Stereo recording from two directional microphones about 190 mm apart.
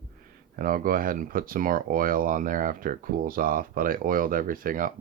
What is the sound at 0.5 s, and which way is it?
Speech, 50° right (ahead or behind).